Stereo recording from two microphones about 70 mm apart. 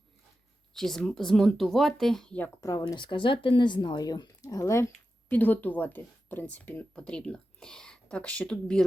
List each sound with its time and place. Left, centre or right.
0.7 s speech: centre
2.6 s speech: left
3.1 s speech: left
5.3 s speech: left
6.9 s speech: centre